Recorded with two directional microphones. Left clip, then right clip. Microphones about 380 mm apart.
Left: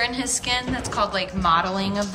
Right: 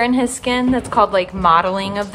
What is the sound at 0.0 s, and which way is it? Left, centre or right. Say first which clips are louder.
A woman's voice: right 7 dB; centre.